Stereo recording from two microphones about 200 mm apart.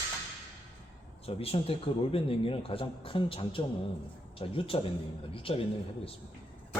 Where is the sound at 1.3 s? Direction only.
30° left (ahead or behind).